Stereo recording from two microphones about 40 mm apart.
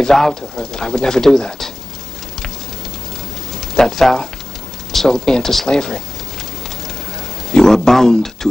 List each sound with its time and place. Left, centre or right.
0.0 s speech: centre
3.7 s speech: centre
5.4 s speech: centre
5.7 s speech: centre
7.5 s a sound: centre